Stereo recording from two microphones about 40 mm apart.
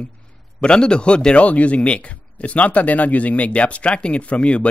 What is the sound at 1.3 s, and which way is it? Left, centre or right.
Speech, left.